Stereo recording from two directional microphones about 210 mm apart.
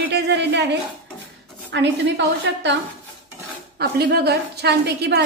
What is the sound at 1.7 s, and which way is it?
A woman's voice, 55° right (ahead or behind).